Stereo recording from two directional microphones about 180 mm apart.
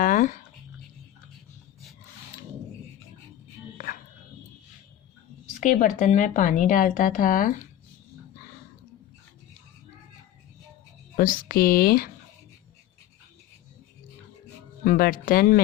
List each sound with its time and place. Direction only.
0.0 s dog: 45° left (ahead or behind)
5.5 s speech: 45° left (ahead or behind)
11.2 s speech: 55° left (ahead or behind)
14.8 s speech: 55° left (ahead or behind)